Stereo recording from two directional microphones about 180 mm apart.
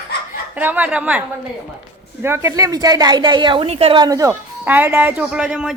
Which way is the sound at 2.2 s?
15° right (ahead or behind).